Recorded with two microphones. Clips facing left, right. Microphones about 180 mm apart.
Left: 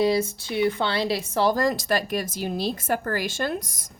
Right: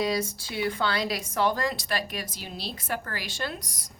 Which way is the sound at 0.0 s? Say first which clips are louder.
Left 6 dB; 25° left (ahead or behind).